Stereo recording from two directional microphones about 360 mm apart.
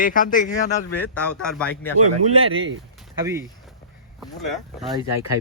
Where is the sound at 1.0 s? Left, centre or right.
Centre.